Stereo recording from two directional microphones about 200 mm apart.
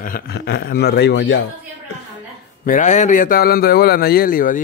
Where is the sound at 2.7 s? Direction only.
35° left (ahead or behind).